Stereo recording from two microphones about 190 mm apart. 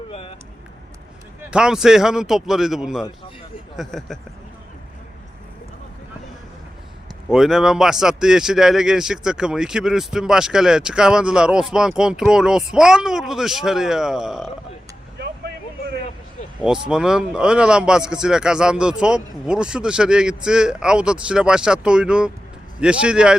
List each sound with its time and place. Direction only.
0.1 s a sound: 30° left (ahead or behind)
1.5 s speech: 5° right (ahead or behind)
7.3 s speech: centre (ahead or behind)
16.6 s speech: 5° right (ahead or behind)